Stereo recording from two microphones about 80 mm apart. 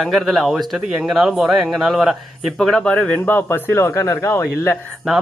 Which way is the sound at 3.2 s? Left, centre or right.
Left.